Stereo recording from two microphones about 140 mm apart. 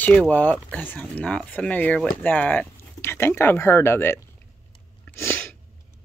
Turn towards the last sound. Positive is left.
turn(degrees=15)  # may be behind; listen again after turning